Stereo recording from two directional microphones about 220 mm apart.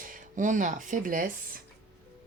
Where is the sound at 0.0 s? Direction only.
35° right (ahead or behind).